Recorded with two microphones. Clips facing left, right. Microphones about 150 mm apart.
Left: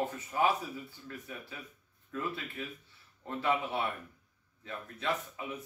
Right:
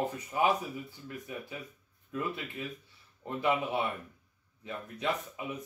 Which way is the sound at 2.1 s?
15° right (ahead or behind).